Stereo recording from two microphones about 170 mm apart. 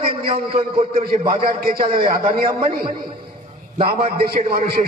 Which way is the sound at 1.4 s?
60° right (ahead or behind).